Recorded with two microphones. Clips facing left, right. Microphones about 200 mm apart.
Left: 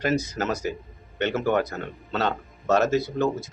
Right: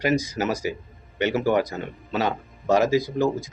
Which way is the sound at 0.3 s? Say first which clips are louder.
Right 2 dB; 10° right (ahead or behind).